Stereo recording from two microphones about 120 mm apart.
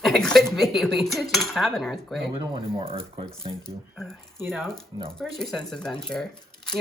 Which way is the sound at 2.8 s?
50° right (ahead or behind).